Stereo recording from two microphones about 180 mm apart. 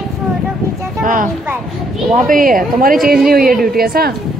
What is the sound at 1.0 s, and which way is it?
Speech, 50° right (ahead or behind).